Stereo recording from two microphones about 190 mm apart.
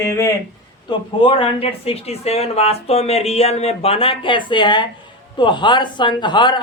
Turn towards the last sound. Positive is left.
turn(degrees=25)  # may be behind; listen again after turning